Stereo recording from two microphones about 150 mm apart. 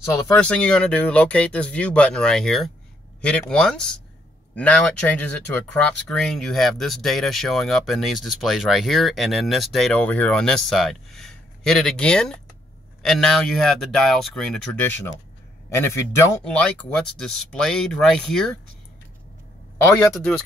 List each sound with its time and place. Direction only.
0.0 s speech: 10° left (ahead or behind)
16.4 s speech: 5° left (ahead or behind)
19.8 s speech: 20° left (ahead or behind)
20.1 s speech: 5° left (ahead or behind)